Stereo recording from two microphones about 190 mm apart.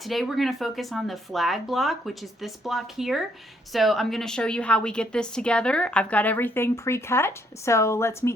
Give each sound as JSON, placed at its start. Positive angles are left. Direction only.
{"t": 0.0, "sound": "a woman's voice", "side_deg": 0}